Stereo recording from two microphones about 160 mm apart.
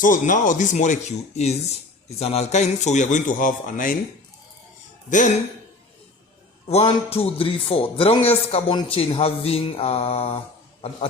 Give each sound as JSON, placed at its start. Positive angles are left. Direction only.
{"t": 0.0, "sound": "a man's voice", "side_deg": 55}
{"t": 5.0, "sound": "a man's voice", "side_deg": 50}
{"t": 6.7, "sound": "a man's voice", "side_deg": 40}